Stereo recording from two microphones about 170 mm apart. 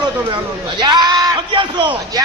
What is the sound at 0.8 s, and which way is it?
Speech, 25° right (ahead or behind).